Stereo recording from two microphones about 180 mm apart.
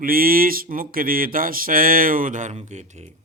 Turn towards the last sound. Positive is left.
turn(degrees=-40)  # may be behind; listen again after turning